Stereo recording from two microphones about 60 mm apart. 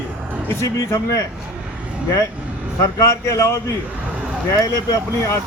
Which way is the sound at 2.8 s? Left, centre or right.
Left.